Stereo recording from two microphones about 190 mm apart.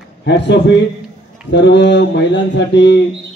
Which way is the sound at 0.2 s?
65° left (ahead or behind).